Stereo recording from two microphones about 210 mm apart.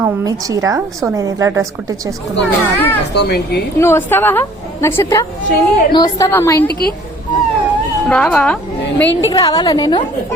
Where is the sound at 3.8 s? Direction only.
10° left (ahead or behind).